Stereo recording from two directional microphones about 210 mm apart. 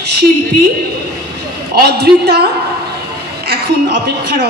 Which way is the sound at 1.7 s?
50° right (ahead or behind).